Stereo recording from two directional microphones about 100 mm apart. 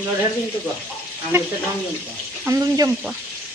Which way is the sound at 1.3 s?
25° right (ahead or behind).